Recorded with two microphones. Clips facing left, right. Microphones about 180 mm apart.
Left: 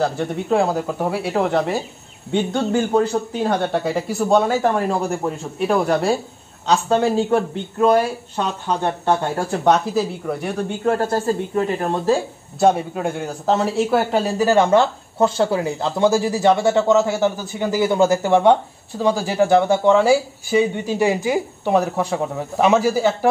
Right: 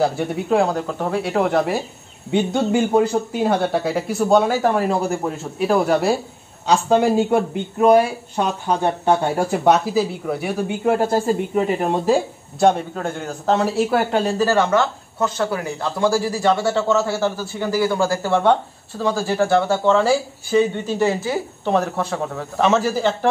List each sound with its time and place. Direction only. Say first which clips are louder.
0.0 s speech: right 1 dB; 5° right (ahead or behind)
12.5 s speech: even; 5° left (ahead or behind)
14.4 s speech: left 4 dB; 20° left (ahead or behind)